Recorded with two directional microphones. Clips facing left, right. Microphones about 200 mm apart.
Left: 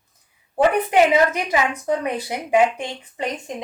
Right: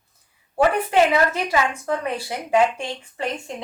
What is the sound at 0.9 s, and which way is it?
A woman's voice, 15° left (ahead or behind).